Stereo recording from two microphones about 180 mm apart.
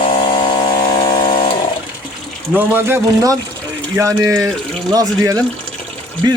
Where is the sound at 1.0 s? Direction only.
20° left (ahead or behind).